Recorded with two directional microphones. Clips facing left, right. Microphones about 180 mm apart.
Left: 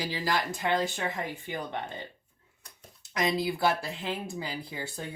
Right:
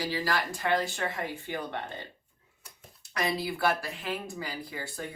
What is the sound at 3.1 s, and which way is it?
Speech, 20° left (ahead or behind).